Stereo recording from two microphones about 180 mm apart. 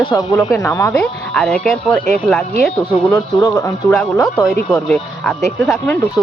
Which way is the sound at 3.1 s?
20° left (ahead or behind).